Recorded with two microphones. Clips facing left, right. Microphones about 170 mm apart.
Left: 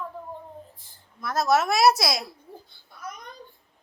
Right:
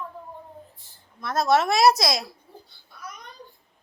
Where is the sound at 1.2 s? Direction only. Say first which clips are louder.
Right 1 dB; 5° left (ahead or behind).